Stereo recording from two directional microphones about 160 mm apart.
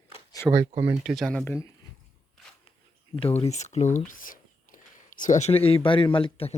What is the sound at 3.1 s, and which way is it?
Speech, 35° left (ahead or behind).